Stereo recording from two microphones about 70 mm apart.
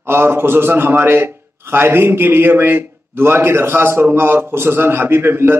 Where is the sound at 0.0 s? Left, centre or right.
Right.